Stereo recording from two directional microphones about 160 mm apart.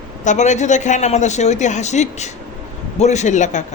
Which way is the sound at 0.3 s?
45° left (ahead or behind).